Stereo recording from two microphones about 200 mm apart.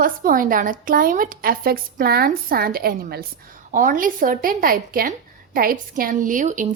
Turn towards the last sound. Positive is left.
turn(degrees=-40)  # may be behind; listen again after turning